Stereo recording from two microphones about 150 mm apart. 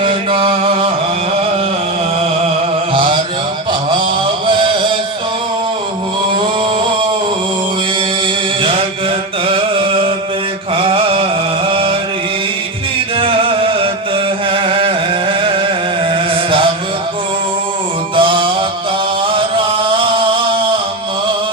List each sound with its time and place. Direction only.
0.0 s mantra: 35° right (ahead or behind)
2.9 s mantra: 35° right (ahead or behind)
4.4 s music: 35° right (ahead or behind)
9.5 s music: 35° right (ahead or behind)
13.1 s music: 35° right (ahead or behind)
14.5 s carnatic music: 35° right (ahead or behind)
16.1 s chant: 35° right (ahead or behind)
18.2 s music: 35° right (ahead or behind)
19.3 s chant: 35° right (ahead or behind)